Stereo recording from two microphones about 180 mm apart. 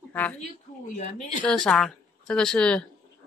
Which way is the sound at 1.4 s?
5° left (ahead or behind).